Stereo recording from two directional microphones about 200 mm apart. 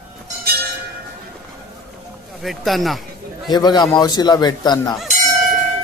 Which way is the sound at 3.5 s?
20° left (ahead or behind).